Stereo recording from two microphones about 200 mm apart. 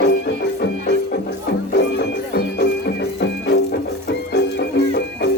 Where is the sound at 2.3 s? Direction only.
55° left (ahead or behind).